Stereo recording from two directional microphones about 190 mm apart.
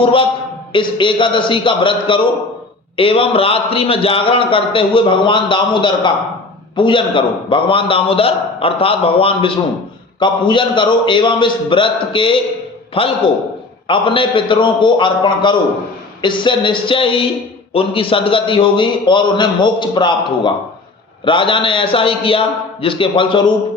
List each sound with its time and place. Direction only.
0.0 s a man's voice: 25° left (ahead or behind)